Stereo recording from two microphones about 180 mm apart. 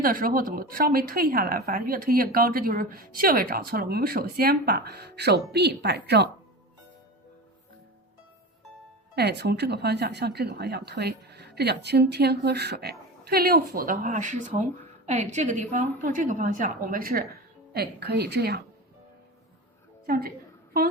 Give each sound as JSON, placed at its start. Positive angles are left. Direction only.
{"t": 0.0, "sound": "speech", "side_deg": -55}
{"t": 9.1, "sound": "a woman's voice", "side_deg": -65}
{"t": 20.1, "sound": "speech", "side_deg": -55}